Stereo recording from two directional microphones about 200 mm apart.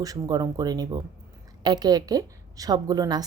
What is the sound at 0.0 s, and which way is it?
A woman's voice, 20° right (ahead or behind).